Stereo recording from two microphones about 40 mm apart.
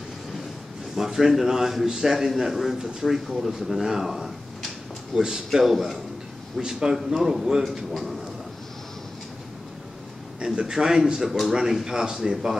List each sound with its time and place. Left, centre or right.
0.9 s speech: centre
2.1 s speech: centre
5.6 s a man's voice: centre
6.5 s speech: centre
7.9 s a man's voice: centre
10.4 s speech: centre
11.1 s a man's voice: centre
11.8 s speech: centre